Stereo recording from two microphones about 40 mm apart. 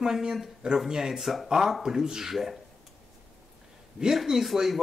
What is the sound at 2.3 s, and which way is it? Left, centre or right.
Speech, centre.